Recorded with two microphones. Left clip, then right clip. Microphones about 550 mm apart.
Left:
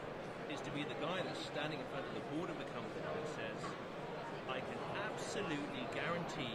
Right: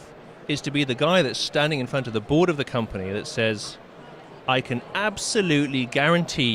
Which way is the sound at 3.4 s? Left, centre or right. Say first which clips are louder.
Right 18 dB; right.